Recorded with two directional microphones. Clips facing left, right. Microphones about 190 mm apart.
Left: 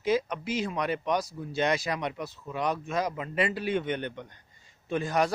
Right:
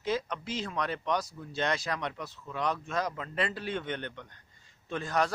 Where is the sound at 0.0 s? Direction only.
10° left (ahead or behind).